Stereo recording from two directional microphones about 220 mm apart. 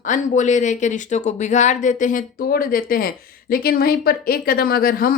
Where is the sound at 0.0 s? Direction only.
35° left (ahead or behind).